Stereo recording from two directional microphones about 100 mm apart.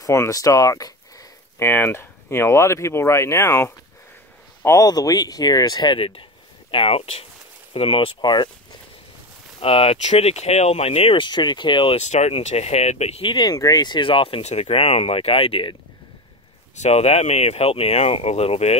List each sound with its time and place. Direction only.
0.0 s speech: 35° left (ahead or behind)
1.6 s speech: 25° left (ahead or behind)
4.6 s speech: 35° left (ahead or behind)
5.9 s speech: 65° left (ahead or behind)
8.2 s speech: 45° left (ahead or behind)
9.6 s speech: 70° left (ahead or behind)
11.2 s speech: 50° left (ahead or behind); by 13.3 s 90° left
13.3 s speech: 50° left (ahead or behind)
13.6 s speech: 40° left (ahead or behind); by 15.7 s 65° left (ahead or behind)
16.9 s speech: 90° left